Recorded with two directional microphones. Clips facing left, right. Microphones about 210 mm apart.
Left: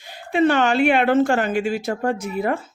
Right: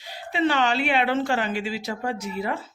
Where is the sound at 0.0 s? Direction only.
50° left (ahead or behind).